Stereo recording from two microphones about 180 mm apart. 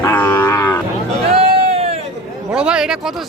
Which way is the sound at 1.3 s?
35° right (ahead or behind).